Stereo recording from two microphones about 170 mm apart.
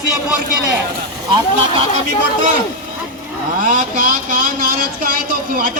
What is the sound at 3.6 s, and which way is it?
Speech, 50° right (ahead or behind).